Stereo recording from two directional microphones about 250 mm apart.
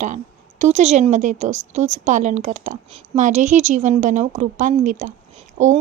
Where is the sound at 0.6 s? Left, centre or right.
Right.